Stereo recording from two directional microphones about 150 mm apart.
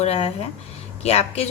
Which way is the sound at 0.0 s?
45° left (ahead or behind).